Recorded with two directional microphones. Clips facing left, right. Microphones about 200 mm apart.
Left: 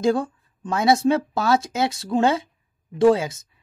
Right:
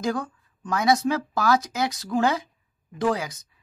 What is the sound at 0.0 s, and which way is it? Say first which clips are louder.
Speech: left 6 dB; 25° left (ahead or behind).